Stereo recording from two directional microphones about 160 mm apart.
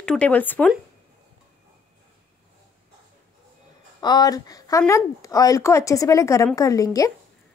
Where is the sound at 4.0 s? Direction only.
25° left (ahead or behind).